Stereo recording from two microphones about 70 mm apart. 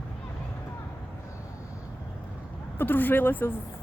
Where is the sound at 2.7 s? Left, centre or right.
Left.